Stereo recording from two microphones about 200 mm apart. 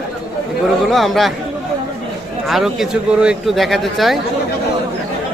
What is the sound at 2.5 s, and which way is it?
Speech, centre (ahead or behind).